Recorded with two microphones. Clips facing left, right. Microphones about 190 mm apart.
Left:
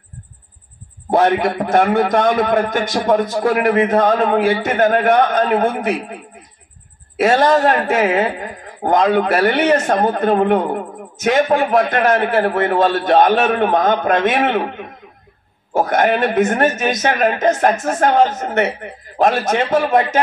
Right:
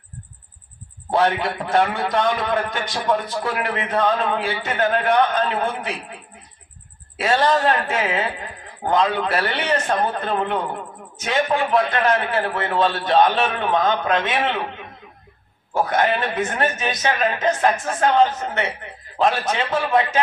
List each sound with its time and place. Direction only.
1.1 s a woman's voice: 50° left (ahead or behind)
7.2 s a woman's voice: 45° left (ahead or behind)